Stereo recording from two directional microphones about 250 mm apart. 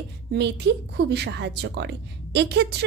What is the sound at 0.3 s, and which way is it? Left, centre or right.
Speech, right.